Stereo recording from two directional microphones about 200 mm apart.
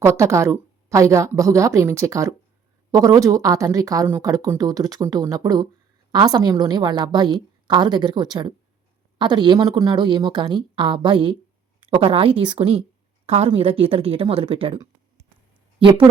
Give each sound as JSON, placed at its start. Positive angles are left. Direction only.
{"t": 0.0, "sound": "a woman's voice", "side_deg": -15}